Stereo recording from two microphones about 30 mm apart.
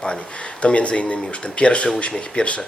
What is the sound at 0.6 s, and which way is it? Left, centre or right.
Speech, left.